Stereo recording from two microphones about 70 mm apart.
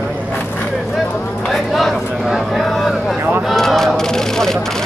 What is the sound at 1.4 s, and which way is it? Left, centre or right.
Speech, centre.